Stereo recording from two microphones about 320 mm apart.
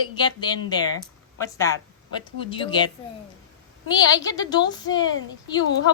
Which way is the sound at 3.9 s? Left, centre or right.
Centre.